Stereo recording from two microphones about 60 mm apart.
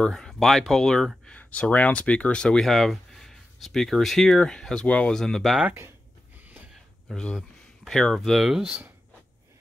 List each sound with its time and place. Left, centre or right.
0.0 s speech: centre
1.4 s speech: left
2.6 s speech: centre
5.1 s speech: centre
7.3 s a sound: centre
8.2 s speech: centre